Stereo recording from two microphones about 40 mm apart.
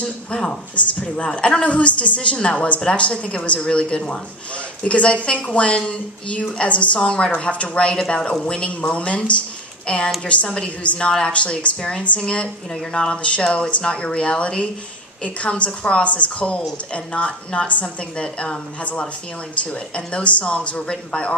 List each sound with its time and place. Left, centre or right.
0.7 s a woman's voice: left
7.0 s a woman's voice: left
11.3 s a woman's voice: left